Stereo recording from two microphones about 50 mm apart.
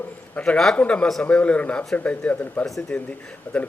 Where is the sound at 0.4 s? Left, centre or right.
Left.